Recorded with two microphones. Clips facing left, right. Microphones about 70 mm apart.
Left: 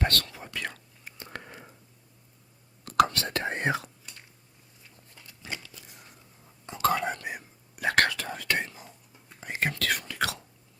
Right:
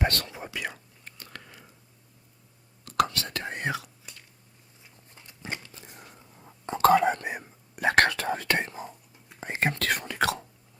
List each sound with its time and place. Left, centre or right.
0.0 s speech: centre
1.2 s a sound: left
2.8 s whispering: left
5.1 s a sound: right
6.7 s whispering: right
7.1 s whispering: right